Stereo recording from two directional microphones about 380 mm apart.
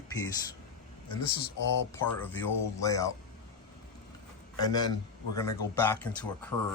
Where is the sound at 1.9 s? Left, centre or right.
Centre.